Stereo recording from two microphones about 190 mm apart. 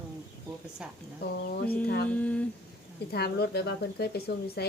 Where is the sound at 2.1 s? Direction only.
5° left (ahead or behind).